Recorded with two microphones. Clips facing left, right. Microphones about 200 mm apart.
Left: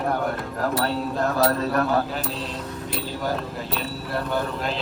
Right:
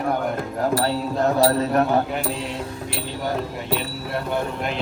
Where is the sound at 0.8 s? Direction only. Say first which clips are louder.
Right 3 dB; 20° right (ahead or behind).